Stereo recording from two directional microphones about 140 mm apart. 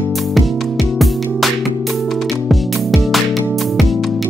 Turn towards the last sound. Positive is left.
turn(degrees=0)  # may be behind; listen again after turning